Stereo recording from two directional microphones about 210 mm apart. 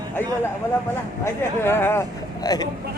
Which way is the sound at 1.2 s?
10° left (ahead or behind).